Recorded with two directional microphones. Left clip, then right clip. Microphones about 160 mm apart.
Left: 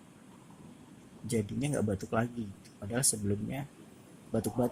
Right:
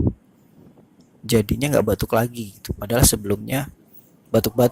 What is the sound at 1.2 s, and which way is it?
Speech, 65° right (ahead or behind).